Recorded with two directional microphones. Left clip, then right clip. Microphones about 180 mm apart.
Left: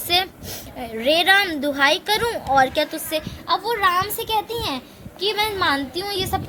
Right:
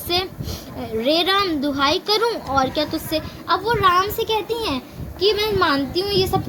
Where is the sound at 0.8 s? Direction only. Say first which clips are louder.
Even; 45° left (ahead or behind).